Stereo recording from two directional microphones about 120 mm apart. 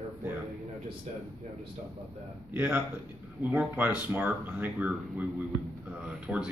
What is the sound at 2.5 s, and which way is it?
Speech, 10° right (ahead or behind).